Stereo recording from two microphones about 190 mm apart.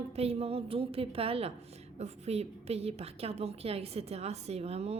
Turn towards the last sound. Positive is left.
turn(degrees=-35)  # may be behind; listen again after turning